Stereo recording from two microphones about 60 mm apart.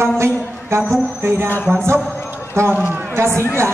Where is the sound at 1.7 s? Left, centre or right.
Right.